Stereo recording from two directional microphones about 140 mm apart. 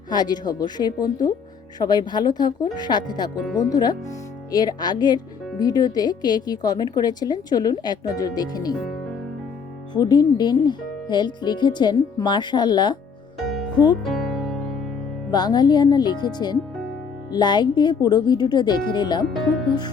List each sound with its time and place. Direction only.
0.1 s speech: 30° left (ahead or behind)
9.9 s speech: 30° left (ahead or behind)
14.0 s music: centre (ahead or behind)
15.3 s speech: 30° left (ahead or behind)